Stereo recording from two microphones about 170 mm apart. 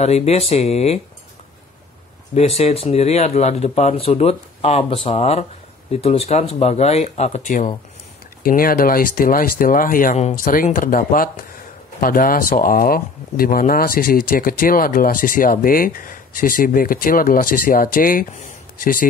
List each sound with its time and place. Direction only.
0.0 s speech: 40° left (ahead or behind)
2.3 s speech: 35° left (ahead or behind)
8.4 s speech: 55° left (ahead or behind)